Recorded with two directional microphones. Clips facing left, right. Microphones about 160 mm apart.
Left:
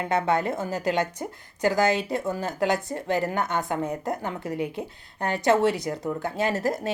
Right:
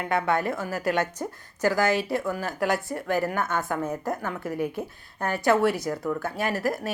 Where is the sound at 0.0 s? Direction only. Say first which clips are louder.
Left 1 dB; 25° left (ahead or behind).